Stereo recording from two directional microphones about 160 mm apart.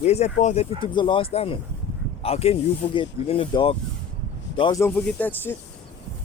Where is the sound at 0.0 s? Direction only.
45° left (ahead or behind).